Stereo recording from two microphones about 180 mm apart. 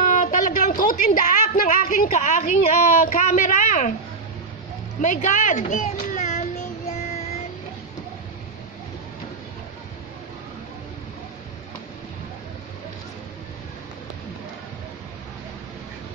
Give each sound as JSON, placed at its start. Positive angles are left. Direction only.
{"t": 0.0, "sound": "a sound", "side_deg": 45}
{"t": 3.1, "sound": "a woman's voice", "side_deg": 45}
{"t": 5.0, "sound": "child singing", "side_deg": 45}